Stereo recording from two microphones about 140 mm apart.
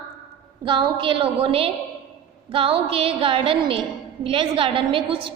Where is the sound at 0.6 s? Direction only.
35° right (ahead or behind).